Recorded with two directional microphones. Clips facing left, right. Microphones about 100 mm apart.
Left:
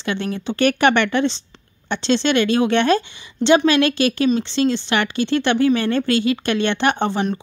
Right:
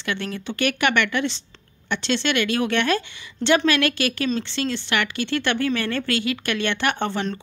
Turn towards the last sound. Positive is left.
turn(degrees=15)  # may be behind; listen again after turning